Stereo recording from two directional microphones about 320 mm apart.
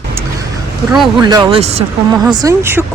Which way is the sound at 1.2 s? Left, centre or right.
Centre.